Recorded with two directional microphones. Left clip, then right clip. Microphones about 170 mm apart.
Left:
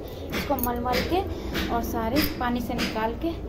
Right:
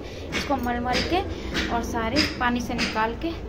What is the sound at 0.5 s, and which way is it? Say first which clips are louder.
A woman's voice: right 1 dB; 10° left (ahead or behind).